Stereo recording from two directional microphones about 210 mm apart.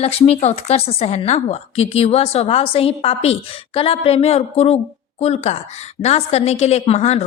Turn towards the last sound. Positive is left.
turn(degrees=30)  # may be behind; listen again after turning